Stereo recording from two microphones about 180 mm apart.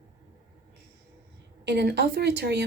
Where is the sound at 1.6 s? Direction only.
70° right (ahead or behind).